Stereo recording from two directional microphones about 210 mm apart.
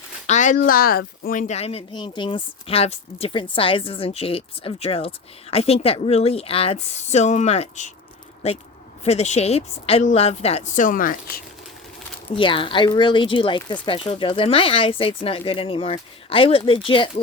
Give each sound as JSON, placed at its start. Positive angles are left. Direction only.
{"t": 0.3, "sound": "a woman's voice", "side_deg": 35}
{"t": 12.4, "sound": "speech", "side_deg": 25}